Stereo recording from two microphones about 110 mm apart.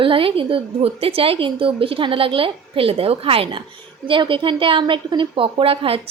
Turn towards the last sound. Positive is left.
turn(degrees=-60)  # may be behind; listen again after turning